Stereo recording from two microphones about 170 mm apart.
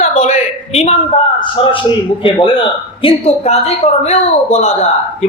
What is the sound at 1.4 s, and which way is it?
A man's voice, 30° left (ahead or behind).